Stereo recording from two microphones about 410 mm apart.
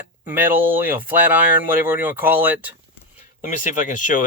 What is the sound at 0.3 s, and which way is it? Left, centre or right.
Speech, centre.